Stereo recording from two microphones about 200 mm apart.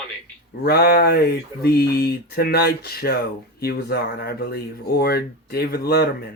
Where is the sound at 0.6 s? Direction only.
50° left (ahead or behind).